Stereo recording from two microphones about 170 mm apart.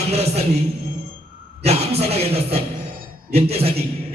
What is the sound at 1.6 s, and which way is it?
A man's voice, 40° right (ahead or behind).